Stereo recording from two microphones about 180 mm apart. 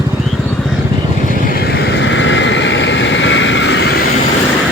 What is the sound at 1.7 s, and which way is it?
Vehicle, 70° left (ahead or behind).